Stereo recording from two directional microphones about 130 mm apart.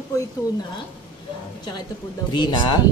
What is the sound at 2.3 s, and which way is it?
Speech, 35° left (ahead or behind).